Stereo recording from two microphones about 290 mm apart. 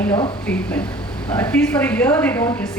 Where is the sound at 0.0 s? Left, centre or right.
Centre.